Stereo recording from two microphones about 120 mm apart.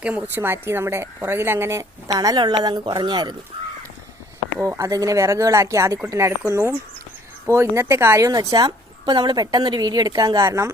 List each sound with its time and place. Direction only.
0.0 s speech: 10° right (ahead or behind); by 3.3 s 35° right (ahead or behind)
4.6 s speech: 25° right (ahead or behind)